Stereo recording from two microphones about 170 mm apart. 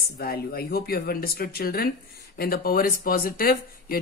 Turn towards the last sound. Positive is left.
turn(degrees=60)  # may be behind; listen again after turning